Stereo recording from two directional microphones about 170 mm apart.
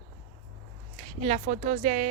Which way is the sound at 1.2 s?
40° right (ahead or behind).